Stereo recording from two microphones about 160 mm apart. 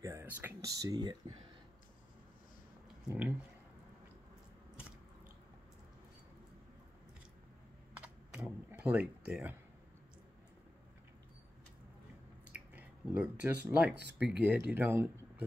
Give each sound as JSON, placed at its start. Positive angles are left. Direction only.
{"t": 0.0, "sound": "speech", "side_deg": -15}
{"t": 3.1, "sound": "speech", "side_deg": -5}
{"t": 7.9, "sound": "computer keyboard", "side_deg": -5}
{"t": 12.4, "sound": "drip", "side_deg": -10}
{"t": 14.1, "sound": "speech", "side_deg": -5}